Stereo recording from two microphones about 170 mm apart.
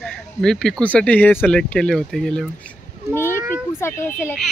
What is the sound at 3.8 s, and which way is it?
Speech, 15° left (ahead or behind).